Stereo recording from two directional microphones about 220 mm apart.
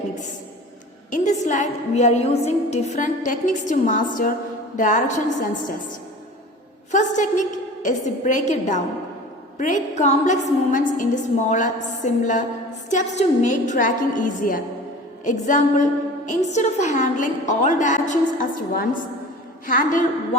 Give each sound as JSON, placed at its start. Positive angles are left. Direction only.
{"t": 1.1, "sound": "a woman's voice", "side_deg": 35}
{"t": 6.9, "sound": "a woman's voice", "side_deg": 35}